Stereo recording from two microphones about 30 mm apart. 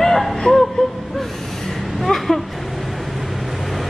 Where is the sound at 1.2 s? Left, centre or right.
Centre.